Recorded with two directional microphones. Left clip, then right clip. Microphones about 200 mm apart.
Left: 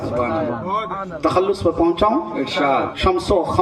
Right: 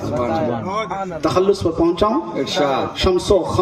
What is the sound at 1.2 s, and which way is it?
Speech, 35° left (ahead or behind).